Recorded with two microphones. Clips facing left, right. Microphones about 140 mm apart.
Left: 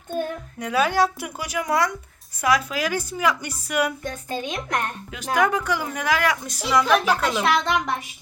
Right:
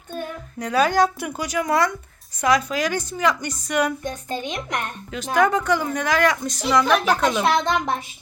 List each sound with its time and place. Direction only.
0.6 s a woman's voice: 5° left (ahead or behind)
4.0 s speech: 20° right (ahead or behind)
5.1 s a woman's voice: 10° left (ahead or behind)
7.4 s speech: 25° right (ahead or behind)